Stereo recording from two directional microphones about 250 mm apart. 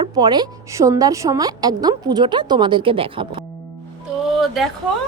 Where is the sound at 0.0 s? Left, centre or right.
Centre.